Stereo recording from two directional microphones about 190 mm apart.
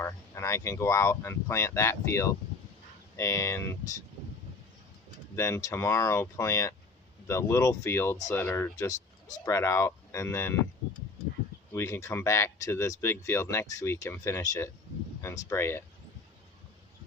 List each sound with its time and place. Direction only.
0.0 s speech: 15° left (ahead or behind)
5.4 s speech: 15° left (ahead or behind)
11.7 s speech: 15° left (ahead or behind)